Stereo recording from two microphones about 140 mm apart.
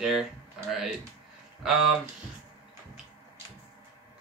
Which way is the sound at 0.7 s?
Centre (ahead or behind).